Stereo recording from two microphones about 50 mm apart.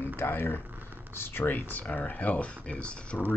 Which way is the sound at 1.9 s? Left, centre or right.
Left.